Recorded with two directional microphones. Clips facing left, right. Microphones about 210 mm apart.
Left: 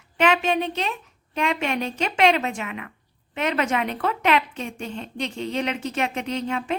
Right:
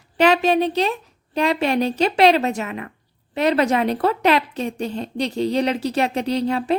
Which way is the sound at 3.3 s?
35° right (ahead or behind).